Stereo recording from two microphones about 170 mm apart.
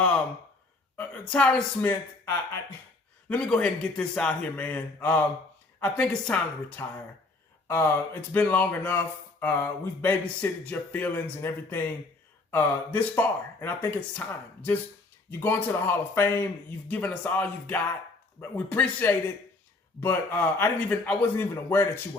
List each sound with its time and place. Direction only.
0.9 s a man's voice: 5° left (ahead or behind)